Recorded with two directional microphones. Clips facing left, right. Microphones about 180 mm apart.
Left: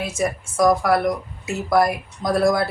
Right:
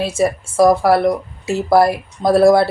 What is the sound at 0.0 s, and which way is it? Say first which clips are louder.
Speech: right 6 dB; 30° right (ahead or behind).